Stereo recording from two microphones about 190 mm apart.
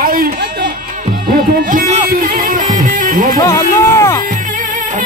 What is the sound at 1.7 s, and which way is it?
Music, 40° right (ahead or behind).